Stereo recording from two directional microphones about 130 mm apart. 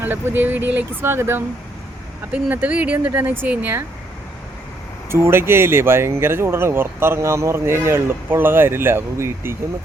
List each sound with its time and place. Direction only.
0.0 s speech: 15° right (ahead or behind)
5.1 s speech: 20° right (ahead or behind)